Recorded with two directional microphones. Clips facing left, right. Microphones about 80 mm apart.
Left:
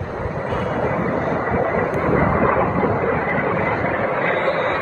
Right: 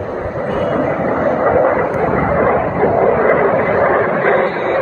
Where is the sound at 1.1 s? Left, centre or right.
Right.